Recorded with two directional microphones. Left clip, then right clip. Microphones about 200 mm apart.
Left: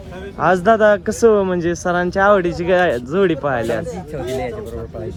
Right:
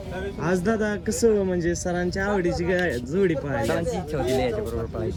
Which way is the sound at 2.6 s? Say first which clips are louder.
Left 11 dB; 65° left (ahead or behind).